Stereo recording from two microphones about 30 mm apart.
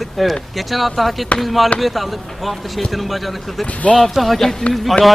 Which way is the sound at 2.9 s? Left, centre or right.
Centre.